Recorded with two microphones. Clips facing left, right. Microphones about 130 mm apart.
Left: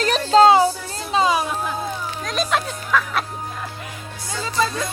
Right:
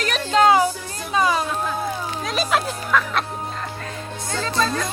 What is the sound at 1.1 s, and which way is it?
Music, 20° left (ahead or behind).